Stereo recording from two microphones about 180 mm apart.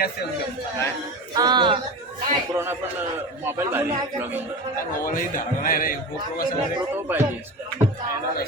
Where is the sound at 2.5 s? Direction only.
15° right (ahead or behind).